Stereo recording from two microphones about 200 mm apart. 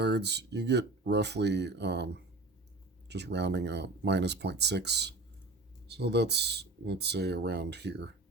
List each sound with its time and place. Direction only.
0.0 s speech: 55° right (ahead or behind)